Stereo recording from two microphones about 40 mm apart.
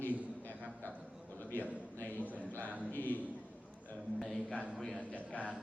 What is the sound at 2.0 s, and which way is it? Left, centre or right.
Speech, left.